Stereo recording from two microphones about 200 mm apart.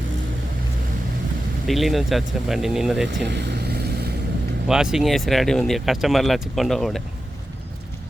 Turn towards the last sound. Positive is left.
turn(degrees=0)  # may be behind; listen again after turning